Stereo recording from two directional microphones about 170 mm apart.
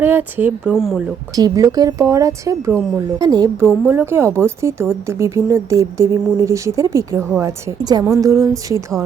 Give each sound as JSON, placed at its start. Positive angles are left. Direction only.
{"t": 0.0, "sound": "a woman's voice", "side_deg": -10}
{"t": 1.4, "sound": "a woman's voice", "side_deg": -20}